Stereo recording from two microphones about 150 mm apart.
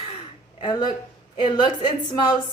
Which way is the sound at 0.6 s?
30° left (ahead or behind).